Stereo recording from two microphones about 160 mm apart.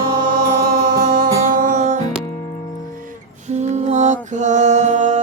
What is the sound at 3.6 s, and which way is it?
Mantra, 50° right (ahead or behind).